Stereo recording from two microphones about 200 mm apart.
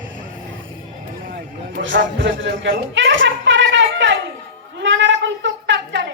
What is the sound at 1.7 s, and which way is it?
Music, 65° right (ahead or behind).